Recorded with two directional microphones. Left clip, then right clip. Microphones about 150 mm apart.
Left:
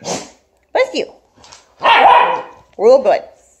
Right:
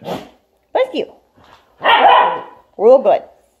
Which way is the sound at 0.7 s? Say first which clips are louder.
Left 1 dB; 25° right (ahead or behind).